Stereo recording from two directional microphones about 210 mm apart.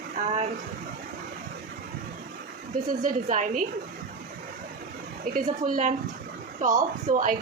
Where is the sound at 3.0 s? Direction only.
35° right (ahead or behind).